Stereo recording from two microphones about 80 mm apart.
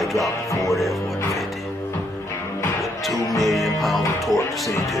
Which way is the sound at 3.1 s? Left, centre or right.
Left.